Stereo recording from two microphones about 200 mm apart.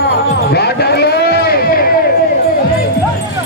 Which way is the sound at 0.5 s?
55° left (ahead or behind).